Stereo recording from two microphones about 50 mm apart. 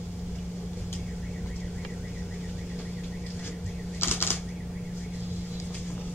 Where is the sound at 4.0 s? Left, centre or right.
Left.